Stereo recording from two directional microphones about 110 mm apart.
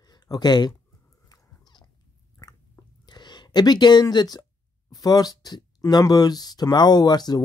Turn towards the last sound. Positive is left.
turn(degrees=40)  # may be behind; listen again after turning